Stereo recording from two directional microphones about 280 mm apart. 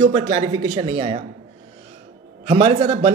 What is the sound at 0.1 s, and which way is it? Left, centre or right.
Speech, right.